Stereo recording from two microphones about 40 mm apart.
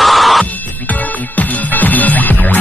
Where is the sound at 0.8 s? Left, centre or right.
Left.